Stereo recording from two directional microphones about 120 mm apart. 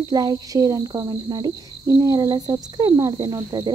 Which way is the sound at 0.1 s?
30° right (ahead or behind).